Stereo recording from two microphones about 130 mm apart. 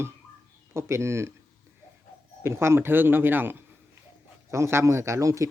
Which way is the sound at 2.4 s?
20° right (ahead or behind).